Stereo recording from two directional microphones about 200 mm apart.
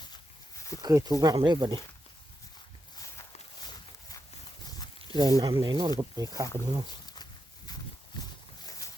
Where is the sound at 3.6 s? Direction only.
20° left (ahead or behind).